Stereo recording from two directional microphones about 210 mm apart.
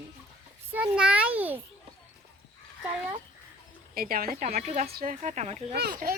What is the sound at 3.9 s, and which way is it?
Speech, 45° right (ahead or behind).